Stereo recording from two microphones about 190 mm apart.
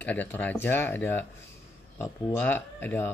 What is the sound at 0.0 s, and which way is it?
Speech, 10° left (ahead or behind).